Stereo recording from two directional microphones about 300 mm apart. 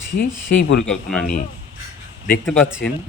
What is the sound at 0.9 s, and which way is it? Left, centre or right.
Speech, centre.